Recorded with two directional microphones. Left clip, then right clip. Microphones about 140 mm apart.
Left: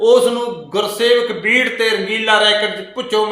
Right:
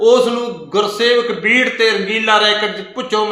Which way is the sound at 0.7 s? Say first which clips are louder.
Right 1 dB; 20° right (ahead or behind).